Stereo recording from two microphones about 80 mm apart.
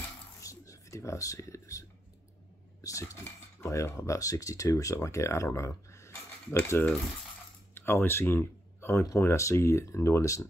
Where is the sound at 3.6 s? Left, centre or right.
Left.